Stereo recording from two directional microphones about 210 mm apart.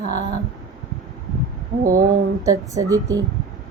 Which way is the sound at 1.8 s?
40° right (ahead or behind).